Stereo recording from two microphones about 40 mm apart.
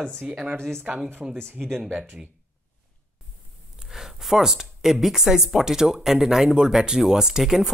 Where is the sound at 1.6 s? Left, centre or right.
Centre.